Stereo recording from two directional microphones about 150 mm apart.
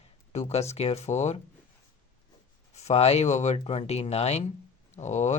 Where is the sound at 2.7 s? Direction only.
45° left (ahead or behind).